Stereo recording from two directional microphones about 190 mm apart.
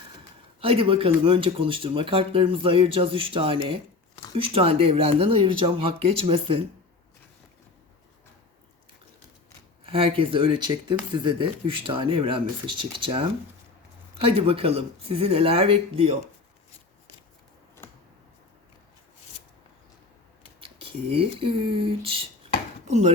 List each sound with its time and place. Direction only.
0.6 s speech: 30° right (ahead or behind)
9.9 s speech: 30° right (ahead or behind)
20.6 s speech: 30° right (ahead or behind)